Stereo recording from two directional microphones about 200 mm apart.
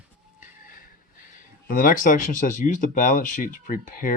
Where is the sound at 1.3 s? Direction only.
45° left (ahead or behind).